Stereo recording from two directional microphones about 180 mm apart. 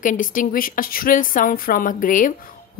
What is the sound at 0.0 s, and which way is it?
A woman's voice, 45° left (ahead or behind).